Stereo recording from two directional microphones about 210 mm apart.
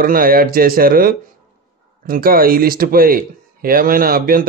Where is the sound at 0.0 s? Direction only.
45° right (ahead or behind).